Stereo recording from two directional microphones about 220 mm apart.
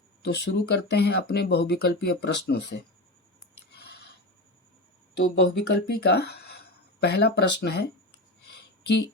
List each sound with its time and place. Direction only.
0.2 s speech: 50° left (ahead or behind)
3.4 s a sound: 50° left (ahead or behind)
5.1 s speech: 55° left (ahead or behind)